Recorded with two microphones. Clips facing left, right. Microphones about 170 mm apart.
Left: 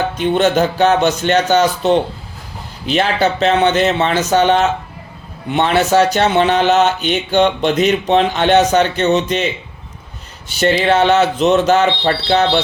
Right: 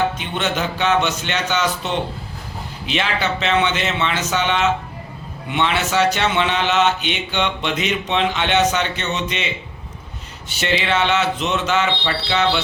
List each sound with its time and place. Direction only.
0.2 s speech: 40° left (ahead or behind)
10.5 s speech: 40° left (ahead or behind)